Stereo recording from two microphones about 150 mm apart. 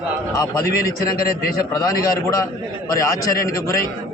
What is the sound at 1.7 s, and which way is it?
A man's voice, 25° left (ahead or behind).